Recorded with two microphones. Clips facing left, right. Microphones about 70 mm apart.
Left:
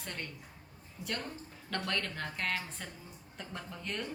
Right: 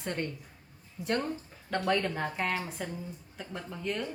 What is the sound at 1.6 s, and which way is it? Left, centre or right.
Speech, centre.